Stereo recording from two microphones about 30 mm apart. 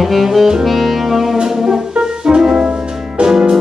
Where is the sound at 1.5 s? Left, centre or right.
Centre.